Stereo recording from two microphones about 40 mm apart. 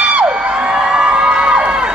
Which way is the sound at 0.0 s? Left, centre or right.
Right.